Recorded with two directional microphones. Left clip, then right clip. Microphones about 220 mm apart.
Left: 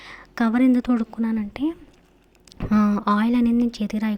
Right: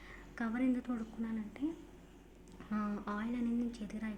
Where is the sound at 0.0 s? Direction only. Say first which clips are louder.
Left 17 dB; 45° left (ahead or behind).